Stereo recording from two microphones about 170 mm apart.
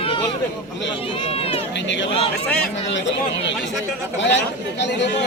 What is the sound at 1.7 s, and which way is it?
Speech, 90° left.